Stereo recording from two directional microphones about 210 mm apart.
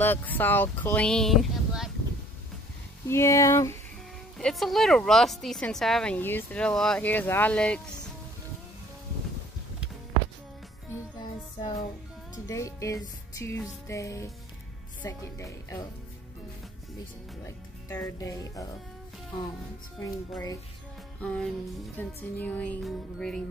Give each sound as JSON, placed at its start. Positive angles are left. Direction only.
{"t": 0.0, "sound": "speech", "side_deg": 10}
{"t": 3.1, "sound": "speech", "side_deg": 15}
{"t": 4.4, "sound": "speech", "side_deg": 0}
{"t": 12.4, "sound": "speech", "side_deg": 15}
{"t": 17.5, "sound": "speech", "side_deg": 10}
{"t": 20.0, "sound": "speech", "side_deg": 15}
{"t": 21.2, "sound": "music", "side_deg": 5}
{"t": 21.9, "sound": "speech", "side_deg": 10}